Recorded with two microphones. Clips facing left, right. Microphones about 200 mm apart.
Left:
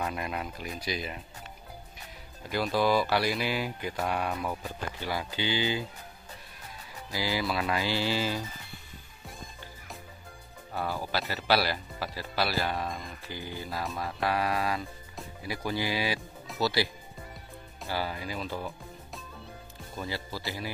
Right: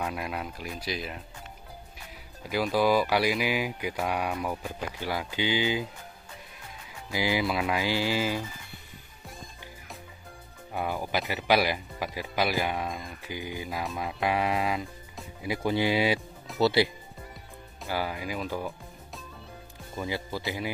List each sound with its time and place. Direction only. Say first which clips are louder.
0.0 s speech: right 1 dB; 5° right (ahead or behind)
2.5 s speech: right 2 dB; 10° right (ahead or behind)
7.1 s speech: right 3 dB; 20° right (ahead or behind)
10.7 s speech: right 2 dB; 15° right (ahead or behind)
15.4 s music: right 6 dB; 20° right (ahead or behind)
17.8 s speech: right 2 dB; 15° right (ahead or behind)
20.1 s music: right 5 dB; 20° right (ahead or behind)